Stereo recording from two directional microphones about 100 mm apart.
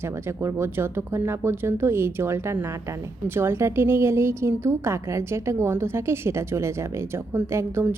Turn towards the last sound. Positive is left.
turn(degrees=-25)  # may be behind; listen again after turning